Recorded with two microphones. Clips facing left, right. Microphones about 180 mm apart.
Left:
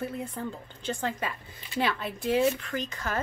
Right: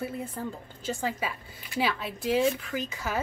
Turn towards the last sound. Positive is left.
turn(degrees=-10)  # may be behind; listen again after turning